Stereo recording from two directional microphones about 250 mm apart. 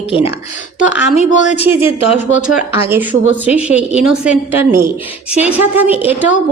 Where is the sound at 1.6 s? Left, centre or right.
Centre.